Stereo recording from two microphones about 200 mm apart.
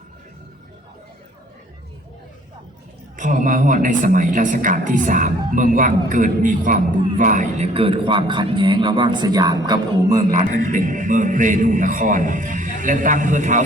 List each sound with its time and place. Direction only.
3.2 s a man's voice: 40° right (ahead or behind)
7.7 s speech: 25° right (ahead or behind)
10.2 s a man's voice: 40° right (ahead or behind)